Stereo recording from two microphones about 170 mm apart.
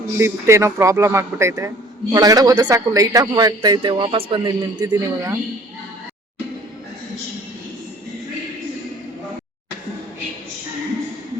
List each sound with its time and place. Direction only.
0.2 s a man's voice: 15° right (ahead or behind)